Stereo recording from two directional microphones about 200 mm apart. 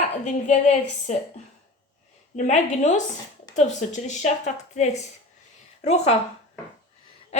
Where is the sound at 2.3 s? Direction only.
35° left (ahead or behind).